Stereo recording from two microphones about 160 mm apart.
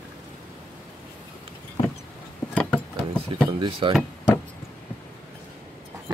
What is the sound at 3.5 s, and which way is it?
Speech, 35° right (ahead or behind).